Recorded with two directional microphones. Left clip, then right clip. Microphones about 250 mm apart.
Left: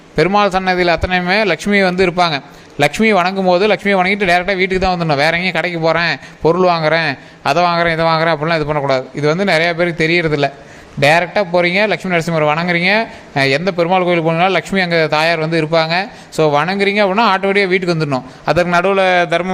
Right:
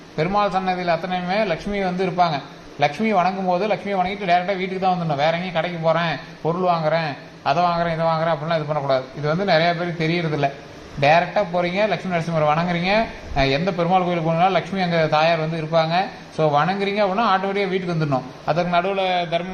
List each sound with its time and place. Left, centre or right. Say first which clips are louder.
0.2 s a man's voice: left 7 dB; left